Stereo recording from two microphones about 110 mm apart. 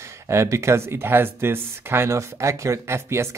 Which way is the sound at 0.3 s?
25° right (ahead or behind).